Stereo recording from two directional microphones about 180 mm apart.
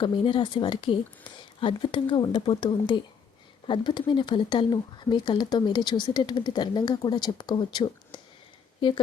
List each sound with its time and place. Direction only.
0.0 s speech: 25° left (ahead or behind)